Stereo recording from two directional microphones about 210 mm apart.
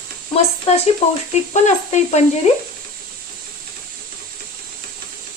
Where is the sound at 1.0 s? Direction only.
30° left (ahead or behind).